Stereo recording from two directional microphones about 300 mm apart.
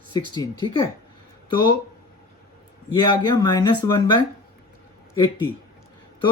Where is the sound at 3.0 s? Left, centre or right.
Centre.